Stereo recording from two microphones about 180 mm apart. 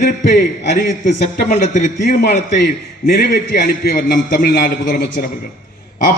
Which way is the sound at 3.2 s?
55° left (ahead or behind).